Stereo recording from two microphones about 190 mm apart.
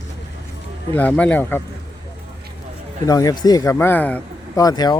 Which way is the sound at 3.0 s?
20° left (ahead or behind).